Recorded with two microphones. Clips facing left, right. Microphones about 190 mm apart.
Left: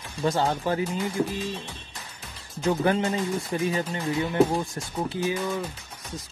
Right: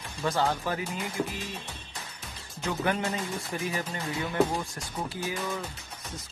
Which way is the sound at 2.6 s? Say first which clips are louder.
Left 6 dB; 30° left (ahead or behind).